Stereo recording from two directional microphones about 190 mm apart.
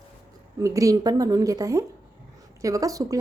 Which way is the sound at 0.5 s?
15° right (ahead or behind).